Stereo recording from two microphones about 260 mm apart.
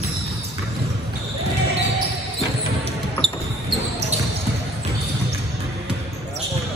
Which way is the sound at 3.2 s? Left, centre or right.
Centre.